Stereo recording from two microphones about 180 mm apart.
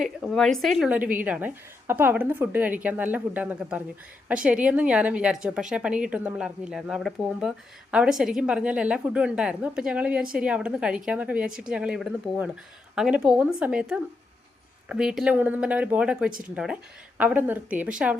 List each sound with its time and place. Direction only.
0.0 s a woman's voice: centre (ahead or behind)